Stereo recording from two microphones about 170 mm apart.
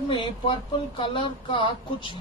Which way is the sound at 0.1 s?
30° left (ahead or behind).